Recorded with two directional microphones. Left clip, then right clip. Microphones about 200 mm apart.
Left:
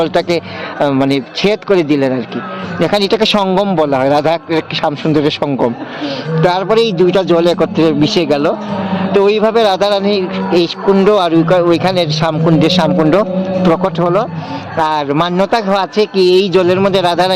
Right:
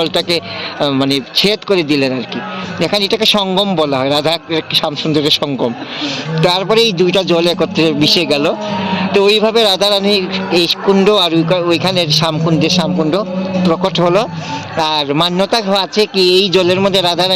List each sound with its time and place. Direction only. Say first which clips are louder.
0.0 s a man's voice: left 1 dB; 5° left (ahead or behind)
12.7 s a man's voice: left 4 dB; 15° left (ahead or behind)
13.8 s a man's voice: right 1 dB; 5° right (ahead or behind)